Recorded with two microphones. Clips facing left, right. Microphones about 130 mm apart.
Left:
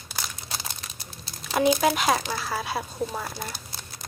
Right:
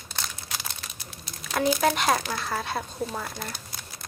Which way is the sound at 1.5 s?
30° left (ahead or behind).